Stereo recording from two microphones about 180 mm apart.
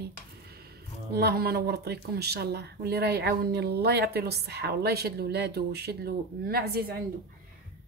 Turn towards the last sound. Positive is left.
turn(degrees=-60)  # may be behind; listen again after turning